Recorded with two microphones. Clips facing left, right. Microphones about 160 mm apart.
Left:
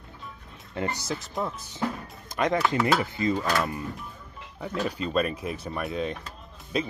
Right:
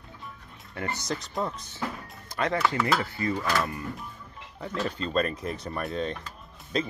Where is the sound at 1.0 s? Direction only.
5° left (ahead or behind).